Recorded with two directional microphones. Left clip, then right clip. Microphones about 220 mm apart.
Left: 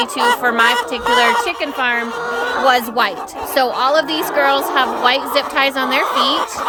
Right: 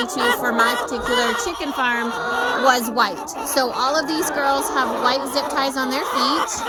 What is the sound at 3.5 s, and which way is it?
Speech, 25° left (ahead or behind).